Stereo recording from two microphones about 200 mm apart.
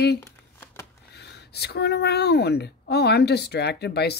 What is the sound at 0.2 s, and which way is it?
Crumpling, 10° left (ahead or behind).